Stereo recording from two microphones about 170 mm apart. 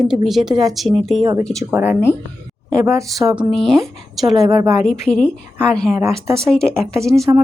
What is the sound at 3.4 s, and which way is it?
Speech, centre (ahead or behind).